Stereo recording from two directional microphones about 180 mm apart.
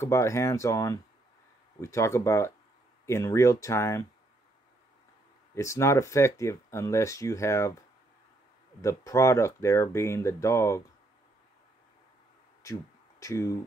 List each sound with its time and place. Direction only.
0.0 s speech: 15° left (ahead or behind)
5.5 s speech: 15° left (ahead or behind)
8.8 s speech: 15° left (ahead or behind)
12.6 s speech: 15° left (ahead or behind)